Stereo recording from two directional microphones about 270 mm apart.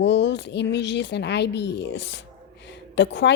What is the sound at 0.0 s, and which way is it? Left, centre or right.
A woman's voice, left.